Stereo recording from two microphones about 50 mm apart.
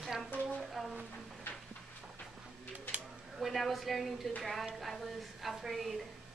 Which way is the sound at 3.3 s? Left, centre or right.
Centre.